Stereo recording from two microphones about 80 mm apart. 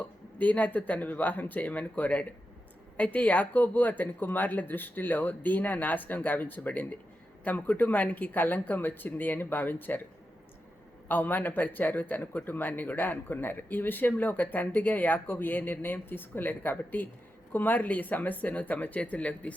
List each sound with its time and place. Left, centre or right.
0.0 s speech: centre
11.1 s speech: left